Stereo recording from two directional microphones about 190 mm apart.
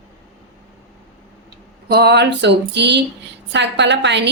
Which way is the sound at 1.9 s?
60° right (ahead or behind).